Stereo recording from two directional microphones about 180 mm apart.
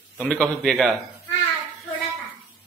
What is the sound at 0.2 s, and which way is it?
Speech, 5° left (ahead or behind).